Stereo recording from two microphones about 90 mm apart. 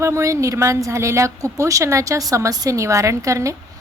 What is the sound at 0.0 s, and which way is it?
Speech, 35° right (ahead or behind).